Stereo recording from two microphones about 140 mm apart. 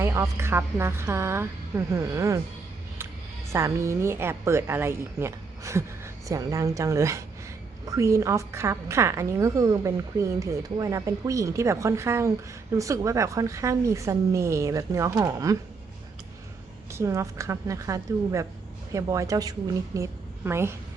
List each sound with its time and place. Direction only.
0.0 s a woman's voice: 20° right (ahead or behind)
3.5 s a woman's voice: 20° right (ahead or behind)
16.9 s a woman's voice: 20° right (ahead or behind)